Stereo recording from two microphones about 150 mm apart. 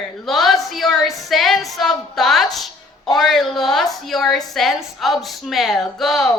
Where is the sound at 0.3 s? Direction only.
Centre (ahead or behind).